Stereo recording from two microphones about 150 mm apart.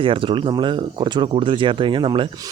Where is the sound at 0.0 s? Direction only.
35° right (ahead or behind).